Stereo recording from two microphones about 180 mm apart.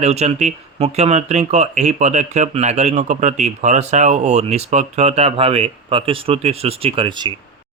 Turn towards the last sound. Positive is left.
turn(degrees=-25)  # may be behind; listen again after turning